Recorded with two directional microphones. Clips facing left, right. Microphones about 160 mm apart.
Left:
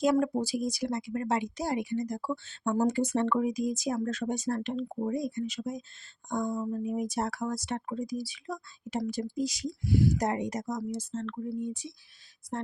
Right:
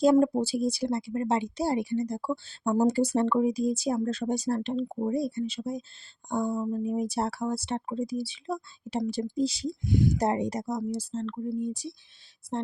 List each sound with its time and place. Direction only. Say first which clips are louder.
0.0 s speech: right 5 dB; 30° right (ahead or behind)
9.9 s speech: even; 20° right (ahead or behind)
10.2 s speech: right 3 dB; 30° right (ahead or behind)